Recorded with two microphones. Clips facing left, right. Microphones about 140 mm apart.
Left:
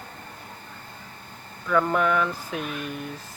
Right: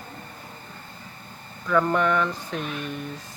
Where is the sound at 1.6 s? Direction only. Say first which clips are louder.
Right 1 dB; centre (ahead or behind).